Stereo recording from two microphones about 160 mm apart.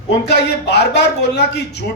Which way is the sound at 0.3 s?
90° left.